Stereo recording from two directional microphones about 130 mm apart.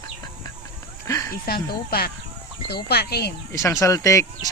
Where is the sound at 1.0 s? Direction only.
25° left (ahead or behind).